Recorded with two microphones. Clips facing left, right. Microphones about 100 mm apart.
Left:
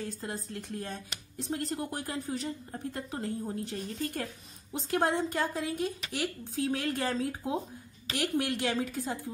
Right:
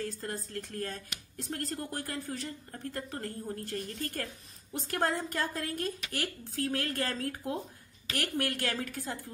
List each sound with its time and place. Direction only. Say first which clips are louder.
0.0 s speech: even; 15° left (ahead or behind)